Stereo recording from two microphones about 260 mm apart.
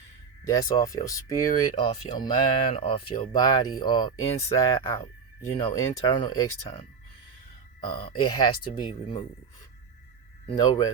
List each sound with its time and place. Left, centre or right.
0.4 s speech: centre
7.9 s speech: centre
10.4 s speech: centre